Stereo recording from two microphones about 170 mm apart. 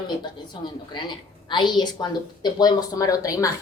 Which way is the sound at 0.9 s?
25° left (ahead or behind).